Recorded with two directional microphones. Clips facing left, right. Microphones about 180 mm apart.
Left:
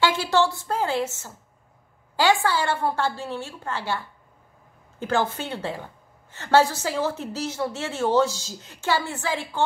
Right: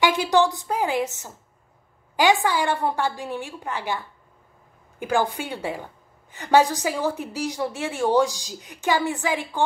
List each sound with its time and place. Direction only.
0.0 s a woman's voice: 15° right (ahead or behind)